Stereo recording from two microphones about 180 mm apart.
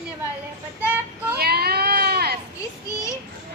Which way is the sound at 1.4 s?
60° right (ahead or behind).